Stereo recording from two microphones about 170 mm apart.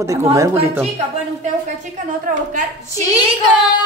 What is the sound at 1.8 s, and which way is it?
Speech, 50° right (ahead or behind).